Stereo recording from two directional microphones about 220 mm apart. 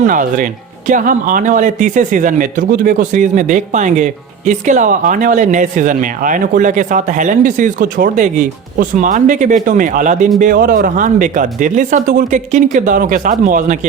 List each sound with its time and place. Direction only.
0.0 s speech: 35° right (ahead or behind)